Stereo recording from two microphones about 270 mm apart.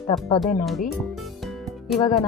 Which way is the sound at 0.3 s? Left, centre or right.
Centre.